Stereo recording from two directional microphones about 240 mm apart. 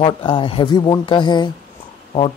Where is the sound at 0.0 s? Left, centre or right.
Centre.